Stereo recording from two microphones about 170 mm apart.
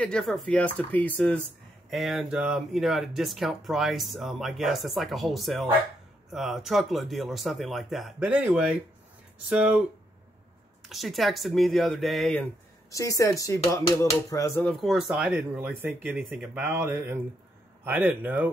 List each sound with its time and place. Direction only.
0.0 s speech: 5° left (ahead or behind)
10.9 s speech: centre (ahead or behind)
12.9 s speech: 20° left (ahead or behind)
14.6 s speech: 5° left (ahead or behind)